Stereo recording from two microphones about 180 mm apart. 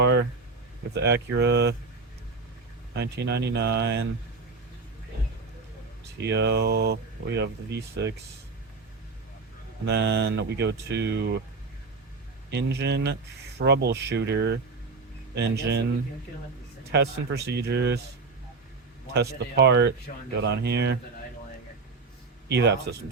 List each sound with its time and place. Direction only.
0.0 s a sound: 70° right (ahead or behind)
0.9 s speech: 70° right (ahead or behind)
2.9 s speech: 70° right (ahead or behind)
6.2 s speech: 70° right (ahead or behind)
9.8 s speech: 70° right (ahead or behind)
12.5 s speech: 70° right (ahead or behind)
16.9 s speech: 65° right (ahead or behind)
19.1 s speech: 65° right (ahead or behind)
22.4 s speech: 75° right (ahead or behind)